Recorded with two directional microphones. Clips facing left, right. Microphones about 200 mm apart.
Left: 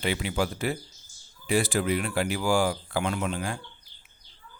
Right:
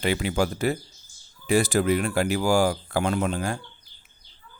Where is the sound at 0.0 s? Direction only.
45° right (ahead or behind).